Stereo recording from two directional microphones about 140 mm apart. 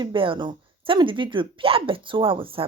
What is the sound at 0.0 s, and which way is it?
Speech, 35° right (ahead or behind).